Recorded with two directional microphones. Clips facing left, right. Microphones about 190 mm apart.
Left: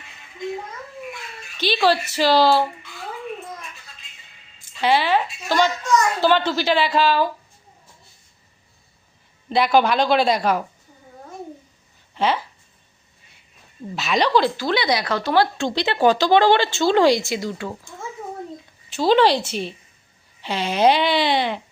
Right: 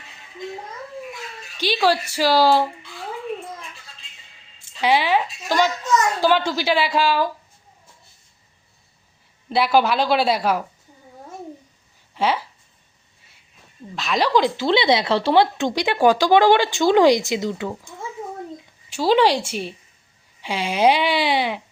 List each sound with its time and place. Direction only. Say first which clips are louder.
0.4 s a sound: left 4 dB; 35° right (ahead or behind)
1.5 s speech: left 1 dB; 15° right (ahead or behind)
4.8 s speech: even; 10° right (ahead or behind)
9.5 s speech: left 1 dB; 5° right (ahead or behind)
12.1 s speech: even; 10° right (ahead or behind)
13.9 s speech: left 1 dB; centre (ahead or behind)
14.3 s speech: right 1 dB; 20° right (ahead or behind)